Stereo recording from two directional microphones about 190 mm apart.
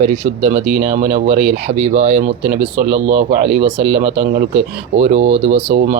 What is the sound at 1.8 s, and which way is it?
Speech, 35° right (ahead or behind).